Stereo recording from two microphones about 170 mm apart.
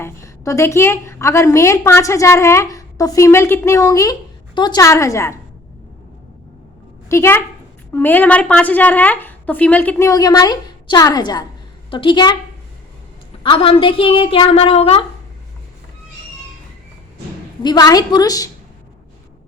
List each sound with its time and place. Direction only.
0.0 s a woman's voice: 15° left (ahead or behind)
7.1 s a woman's voice: 15° left (ahead or behind)
10.1 s a woman's voice: 20° left (ahead or behind)
13.4 s a woman's voice: 30° left (ahead or behind)
17.6 s a woman's voice: 25° left (ahead or behind)